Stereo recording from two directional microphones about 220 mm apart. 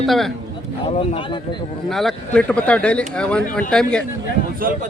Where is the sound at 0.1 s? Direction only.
Centre (ahead or behind).